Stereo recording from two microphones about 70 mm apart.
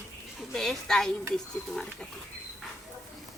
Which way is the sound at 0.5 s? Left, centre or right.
Centre.